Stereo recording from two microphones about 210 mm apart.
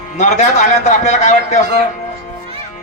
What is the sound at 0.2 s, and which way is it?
A man's voice, 35° left (ahead or behind).